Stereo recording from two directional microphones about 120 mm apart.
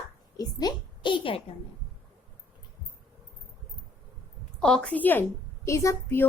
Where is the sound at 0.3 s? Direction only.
40° left (ahead or behind).